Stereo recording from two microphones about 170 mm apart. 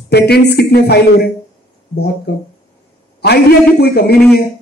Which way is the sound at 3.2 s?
70° left (ahead or behind).